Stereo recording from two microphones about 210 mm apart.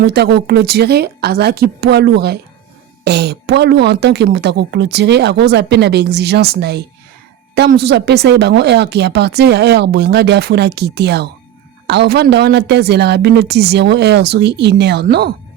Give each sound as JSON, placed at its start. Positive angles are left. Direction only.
{"t": 0.0, "sound": "speech", "side_deg": -50}